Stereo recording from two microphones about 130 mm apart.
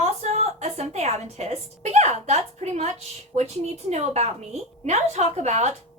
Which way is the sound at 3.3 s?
55° right (ahead or behind).